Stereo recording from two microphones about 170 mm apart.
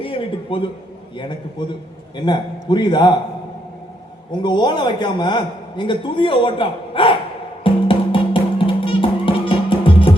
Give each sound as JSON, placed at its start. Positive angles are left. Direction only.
{"t": 0.0, "sound": "a man's voice", "side_deg": 35}
{"t": 4.3, "sound": "a man's voice", "side_deg": 25}
{"t": 7.6, "sound": "music", "side_deg": 30}